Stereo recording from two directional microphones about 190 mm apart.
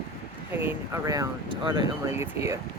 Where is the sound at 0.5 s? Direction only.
10° right (ahead or behind).